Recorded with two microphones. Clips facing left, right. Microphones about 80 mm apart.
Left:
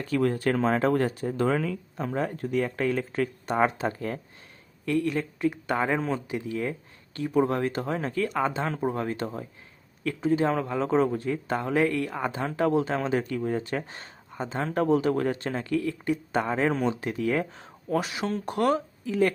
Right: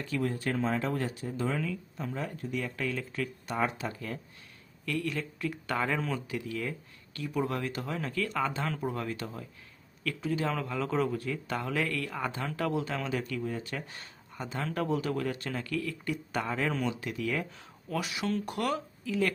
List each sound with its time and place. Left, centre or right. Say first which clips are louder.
0.0 s speech: left 7 dB; left
4.9 s a man's voice: left 7 dB; left